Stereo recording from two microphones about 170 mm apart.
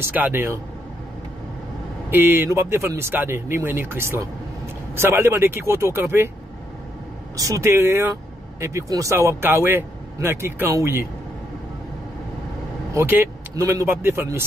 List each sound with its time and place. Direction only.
0.0 s speech: 10° right (ahead or behind)
2.0 s speech: 10° right (ahead or behind)
7.3 s speech: 20° right (ahead or behind)
12.9 s speech: 15° right (ahead or behind)